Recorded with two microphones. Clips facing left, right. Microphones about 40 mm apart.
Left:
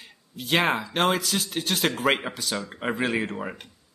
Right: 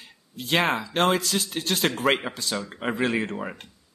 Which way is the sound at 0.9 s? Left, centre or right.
Centre.